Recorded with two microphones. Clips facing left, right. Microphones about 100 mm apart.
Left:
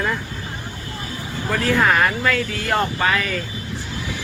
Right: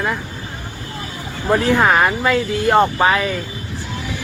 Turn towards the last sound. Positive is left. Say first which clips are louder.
# right 5 dB
turn(degrees=-20)  # may be behind; listen again after turning